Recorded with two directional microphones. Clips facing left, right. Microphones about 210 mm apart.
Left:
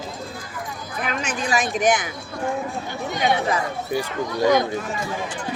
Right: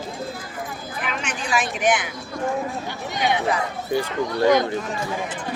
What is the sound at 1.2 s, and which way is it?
Speech, 40° left (ahead or behind).